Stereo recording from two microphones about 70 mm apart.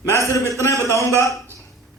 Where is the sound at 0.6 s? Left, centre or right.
Left.